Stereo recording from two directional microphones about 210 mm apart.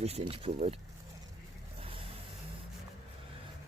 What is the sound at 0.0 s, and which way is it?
Speech, 30° right (ahead or behind).